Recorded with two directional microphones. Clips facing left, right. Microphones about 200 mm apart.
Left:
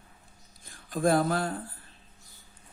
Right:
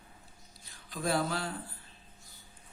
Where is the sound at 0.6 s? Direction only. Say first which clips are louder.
Left 8 dB; 50° left (ahead or behind).